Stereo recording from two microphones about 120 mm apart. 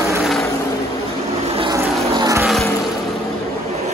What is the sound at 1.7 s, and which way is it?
Vehicle, 30° right (ahead or behind).